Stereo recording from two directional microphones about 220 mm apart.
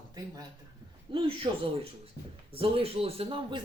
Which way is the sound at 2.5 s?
25° right (ahead or behind).